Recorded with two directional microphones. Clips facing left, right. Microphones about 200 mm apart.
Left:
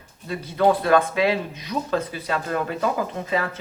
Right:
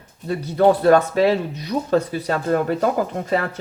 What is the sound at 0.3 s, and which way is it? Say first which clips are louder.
Speech: right 4 dB; 40° right (ahead or behind).